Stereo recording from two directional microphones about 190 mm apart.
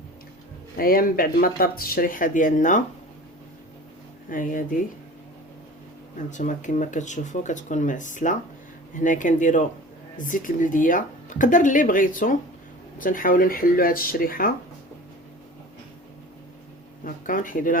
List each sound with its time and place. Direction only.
0.8 s speech: 50° left (ahead or behind)
4.3 s speech: 45° left (ahead or behind)
6.1 s speech: 40° left (ahead or behind)
17.0 s speech: 45° left (ahead or behind)